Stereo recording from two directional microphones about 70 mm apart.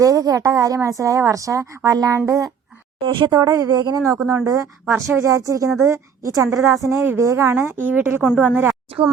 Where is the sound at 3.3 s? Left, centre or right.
Right.